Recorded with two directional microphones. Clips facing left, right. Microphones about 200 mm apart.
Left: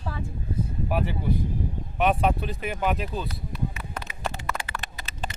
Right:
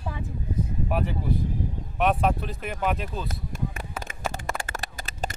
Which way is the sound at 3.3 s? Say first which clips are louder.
Even; 45° right (ahead or behind).